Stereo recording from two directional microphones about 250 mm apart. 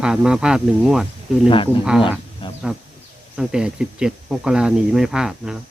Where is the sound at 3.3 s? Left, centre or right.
Centre.